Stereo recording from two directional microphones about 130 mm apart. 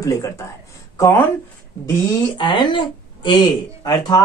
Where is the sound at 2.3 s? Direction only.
40° left (ahead or behind).